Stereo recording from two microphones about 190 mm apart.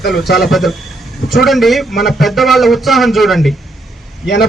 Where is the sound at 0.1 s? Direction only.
Centre (ahead or behind).